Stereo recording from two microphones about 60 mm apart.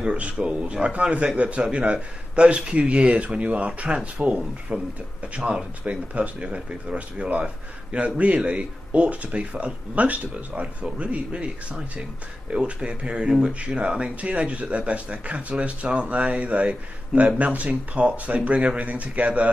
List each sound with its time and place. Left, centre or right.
0.0 s speech: centre